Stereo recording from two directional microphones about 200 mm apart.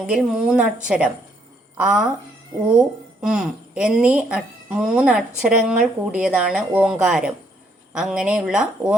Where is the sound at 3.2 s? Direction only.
Centre (ahead or behind).